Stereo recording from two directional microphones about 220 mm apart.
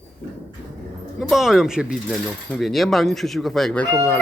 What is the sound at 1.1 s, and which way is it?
Speech, centre (ahead or behind).